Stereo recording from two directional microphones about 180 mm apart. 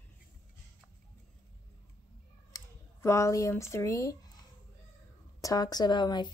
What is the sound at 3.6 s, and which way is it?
Speech, 15° left (ahead or behind).